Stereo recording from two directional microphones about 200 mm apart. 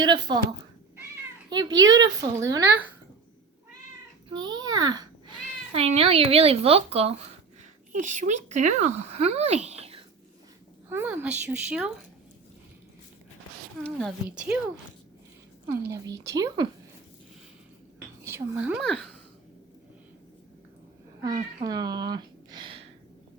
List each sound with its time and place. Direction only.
0.0 s speech: 20° right (ahead or behind)
1.5 s a woman's voice: 20° right (ahead or behind)
4.3 s speech: 20° right (ahead or behind)
5.7 s speech: 30° right (ahead or behind)
10.8 s a woman's voice: 10° right (ahead or behind)
14.3 s a woman's voice: 5° right (ahead or behind)
15.6 s a woman's voice: 10° right (ahead or behind)
18.2 s a woman's voice: 10° right (ahead or behind)
21.6 s a sound: 20° right (ahead or behind)